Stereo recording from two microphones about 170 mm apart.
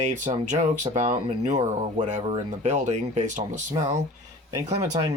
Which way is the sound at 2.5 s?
45° right (ahead or behind).